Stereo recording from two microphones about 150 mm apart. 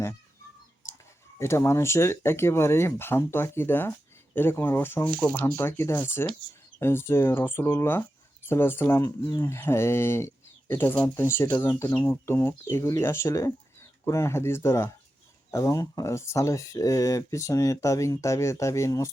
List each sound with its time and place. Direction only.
1.4 s speech: 20° left (ahead or behind)